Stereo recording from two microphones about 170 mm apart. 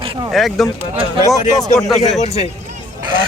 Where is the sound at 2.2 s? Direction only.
40° left (ahead or behind).